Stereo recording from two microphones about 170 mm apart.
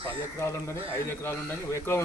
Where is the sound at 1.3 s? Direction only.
15° left (ahead or behind).